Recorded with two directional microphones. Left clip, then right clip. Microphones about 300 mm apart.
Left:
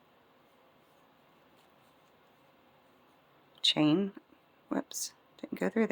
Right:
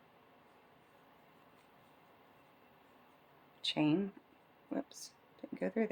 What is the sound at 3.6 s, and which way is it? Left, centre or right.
Speech, left.